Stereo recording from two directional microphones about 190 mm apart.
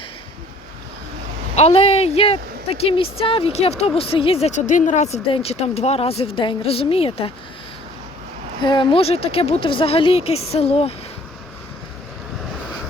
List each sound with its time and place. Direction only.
1.5 s speech: 30° left (ahead or behind)
8.6 s speech: 25° left (ahead or behind)